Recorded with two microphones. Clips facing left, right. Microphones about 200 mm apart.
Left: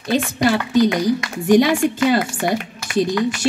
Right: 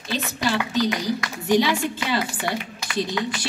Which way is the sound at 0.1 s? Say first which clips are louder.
Left 7 dB; 50° left (ahead or behind).